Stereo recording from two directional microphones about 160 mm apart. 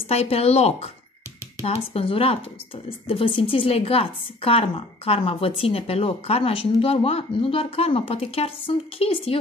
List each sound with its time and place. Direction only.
0.0 s speech: 40° left (ahead or behind)